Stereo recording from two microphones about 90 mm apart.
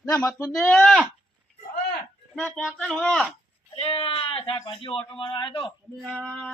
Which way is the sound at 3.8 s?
90° left.